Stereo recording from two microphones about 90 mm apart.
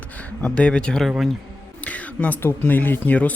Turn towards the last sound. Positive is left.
turn(degrees=15)  # may be behind; listen again after turning